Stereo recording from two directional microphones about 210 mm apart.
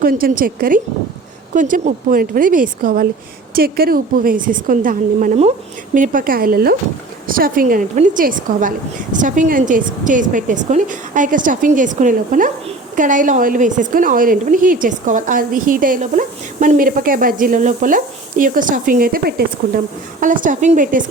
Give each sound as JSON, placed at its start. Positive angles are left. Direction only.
{"t": 0.0, "sound": "a woman's voice", "side_deg": -45}